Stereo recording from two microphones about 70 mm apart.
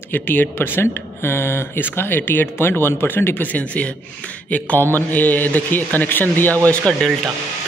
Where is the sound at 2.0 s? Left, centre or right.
Left.